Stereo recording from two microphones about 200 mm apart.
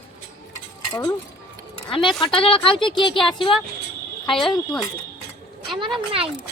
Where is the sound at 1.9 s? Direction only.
25° left (ahead or behind).